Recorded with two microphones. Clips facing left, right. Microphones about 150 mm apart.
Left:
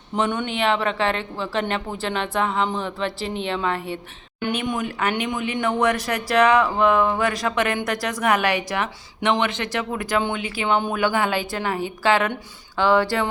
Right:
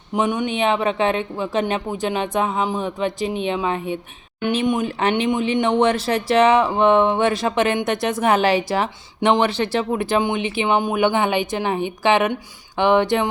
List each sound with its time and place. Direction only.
0.1 s speech: 10° right (ahead or behind)